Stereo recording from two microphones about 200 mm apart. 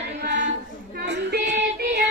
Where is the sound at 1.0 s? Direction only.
60° right (ahead or behind).